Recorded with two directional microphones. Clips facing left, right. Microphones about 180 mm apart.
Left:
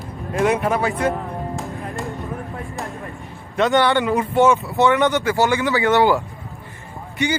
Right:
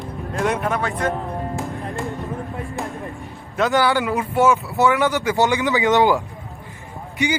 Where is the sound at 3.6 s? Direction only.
Centre (ahead or behind).